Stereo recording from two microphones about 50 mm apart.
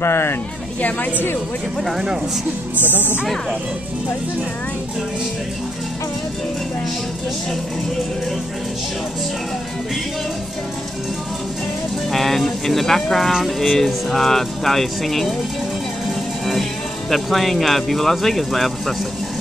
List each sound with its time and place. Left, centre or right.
0.0 s speech: left
2.8 s speech: left
12.1 s speech: centre
17.1 s speech: centre